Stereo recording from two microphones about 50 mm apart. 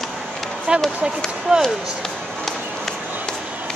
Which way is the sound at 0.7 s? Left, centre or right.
Centre.